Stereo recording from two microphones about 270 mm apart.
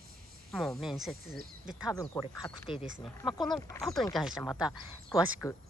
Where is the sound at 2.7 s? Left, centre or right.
Centre.